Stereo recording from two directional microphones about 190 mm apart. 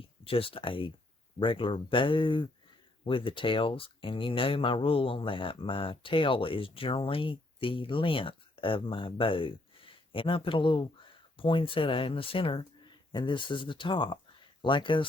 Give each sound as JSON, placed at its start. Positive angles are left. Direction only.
{"t": 0.3, "sound": "speech", "side_deg": 30}